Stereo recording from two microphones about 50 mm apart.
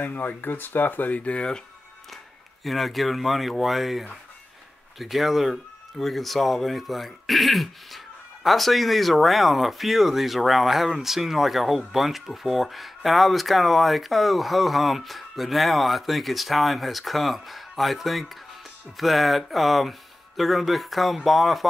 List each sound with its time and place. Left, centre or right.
0.0 s speech: left
2.6 s speech: centre